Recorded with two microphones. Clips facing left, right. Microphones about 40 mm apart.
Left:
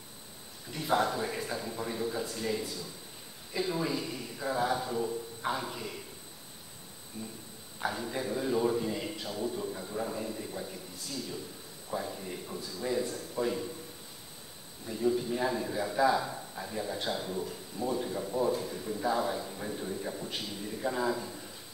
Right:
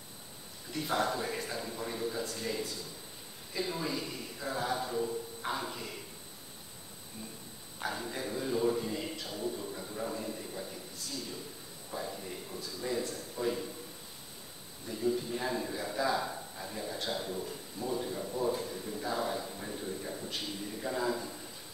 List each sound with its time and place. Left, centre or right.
0.7 s a man's voice: centre
7.2 s a sound: left
7.8 s a man's voice: centre
14.9 s a man's voice: centre